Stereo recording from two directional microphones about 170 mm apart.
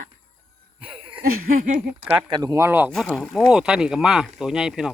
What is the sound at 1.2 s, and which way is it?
Speech, 60° right (ahead or behind).